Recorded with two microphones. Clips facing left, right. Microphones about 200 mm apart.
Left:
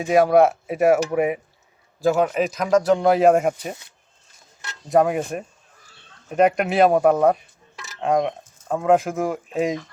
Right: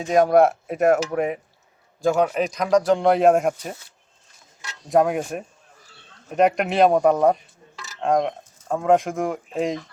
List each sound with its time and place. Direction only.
0.0 s speech: 5° left (ahead or behind)
4.9 s speech: centre (ahead or behind)